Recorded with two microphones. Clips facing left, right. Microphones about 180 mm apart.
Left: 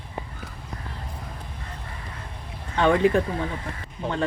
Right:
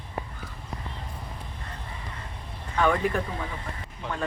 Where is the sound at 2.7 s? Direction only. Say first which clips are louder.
Left 5 dB; 25° left (ahead or behind).